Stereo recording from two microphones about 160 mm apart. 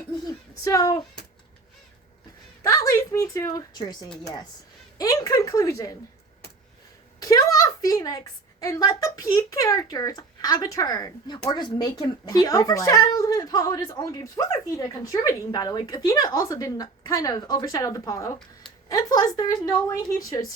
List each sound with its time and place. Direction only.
0.3 s speech: 20° left (ahead or behind)
2.6 s a woman's voice: 20° left (ahead or behind)
7.2 s a woman's voice: 20° left (ahead or behind)